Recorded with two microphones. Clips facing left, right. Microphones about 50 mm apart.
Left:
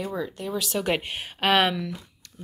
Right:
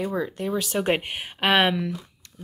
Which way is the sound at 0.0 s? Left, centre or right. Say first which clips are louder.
Right 3 dB; right.